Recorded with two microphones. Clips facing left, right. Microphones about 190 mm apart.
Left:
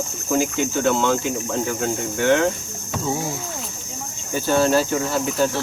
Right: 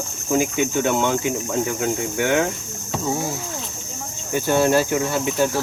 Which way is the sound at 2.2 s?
15° right (ahead or behind).